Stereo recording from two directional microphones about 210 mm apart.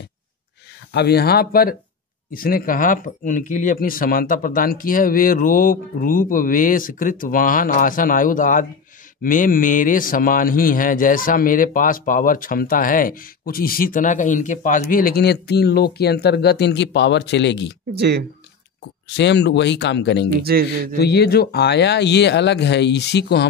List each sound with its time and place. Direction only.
0.9 s speech: 50° left (ahead or behind)
17.9 s speech: 50° right (ahead or behind)
19.1 s speech: 55° left (ahead or behind)
20.4 s speech: 45° right (ahead or behind)
21.0 s speech: 50° left (ahead or behind)